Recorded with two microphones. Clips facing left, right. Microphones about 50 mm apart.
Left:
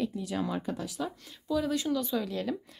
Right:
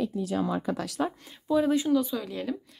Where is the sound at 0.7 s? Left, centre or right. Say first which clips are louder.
Right 4 dB; right.